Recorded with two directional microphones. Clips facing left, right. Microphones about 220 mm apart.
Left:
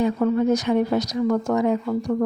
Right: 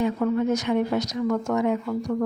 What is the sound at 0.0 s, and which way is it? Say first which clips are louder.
Speech: left 3 dB; 35° left (ahead or behind).